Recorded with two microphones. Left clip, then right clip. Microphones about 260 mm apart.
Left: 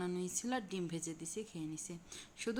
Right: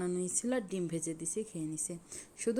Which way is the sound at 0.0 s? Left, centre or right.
Centre.